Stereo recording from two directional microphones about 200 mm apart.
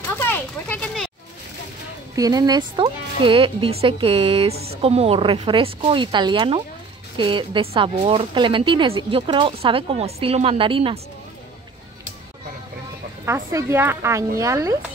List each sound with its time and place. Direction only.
0.2 s children playing: 10° left (ahead or behind)
2.1 s speech: 20° right (ahead or behind)
13.2 s a woman's voice: 15° right (ahead or behind)